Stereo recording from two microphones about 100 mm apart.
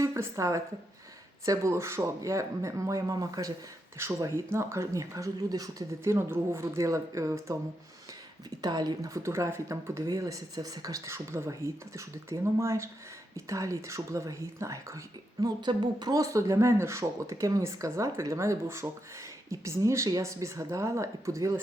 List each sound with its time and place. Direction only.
0.0 s a woman's voice: 30° right (ahead or behind)
4.0 s speech: 25° right (ahead or behind)
8.4 s speech: 40° right (ahead or behind)